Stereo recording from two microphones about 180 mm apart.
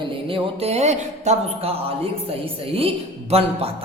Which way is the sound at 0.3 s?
30° right (ahead or behind).